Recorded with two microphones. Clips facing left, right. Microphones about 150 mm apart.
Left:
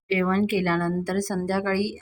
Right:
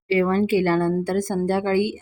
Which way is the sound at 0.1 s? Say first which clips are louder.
Right 4 dB; 30° right (ahead or behind).